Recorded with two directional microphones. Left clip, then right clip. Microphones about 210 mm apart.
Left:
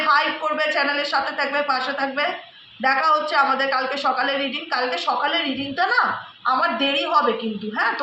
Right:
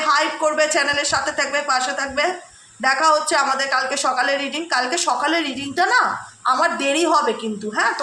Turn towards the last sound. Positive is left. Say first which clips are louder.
# right 2 dB
turn(degrees=-55)  # may be behind; listen again after turning